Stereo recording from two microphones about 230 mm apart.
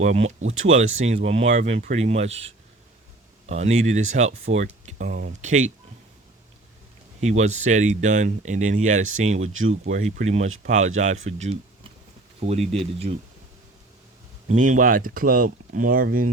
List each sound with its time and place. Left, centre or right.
0.0 s speech: right
7.2 s speech: right
9.5 s speech: right
9.9 s speech: right
14.4 s speech: right